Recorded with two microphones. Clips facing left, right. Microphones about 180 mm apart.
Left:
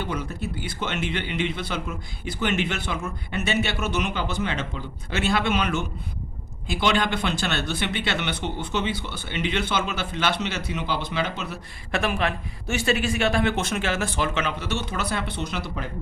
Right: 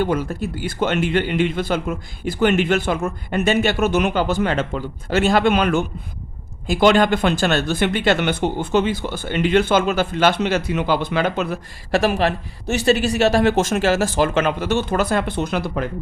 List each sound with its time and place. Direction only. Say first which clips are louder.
0.0 s a man's voice: right 9 dB; 50° right (ahead or behind)
11.9 s a man's voice: right 7 dB; 35° right (ahead or behind); by 15.9 s 55° right (ahead or behind)